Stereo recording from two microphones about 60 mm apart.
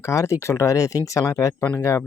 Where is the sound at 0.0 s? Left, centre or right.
Left.